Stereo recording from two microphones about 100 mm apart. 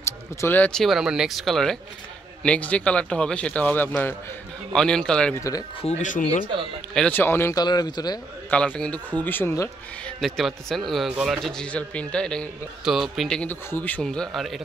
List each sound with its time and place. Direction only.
0.0 s a sound: 25° left (ahead or behind)
0.6 s speech: 5° left (ahead or behind)
4.7 s speech: 5° left (ahead or behind)
5.8 s speech: 90° left
6.4 s a man's voice: 55° right (ahead or behind)
7.1 s speech: 20° left (ahead or behind)
7.5 s a man's voice: 40° left (ahead or behind)
8.5 s speech: 10° left (ahead or behind)
10.2 s speech: centre (ahead or behind)
12.8 s speech: 5° right (ahead or behind)
13.4 s speech: 20° left (ahead or behind)
14.0 s speech: 5° left (ahead or behind)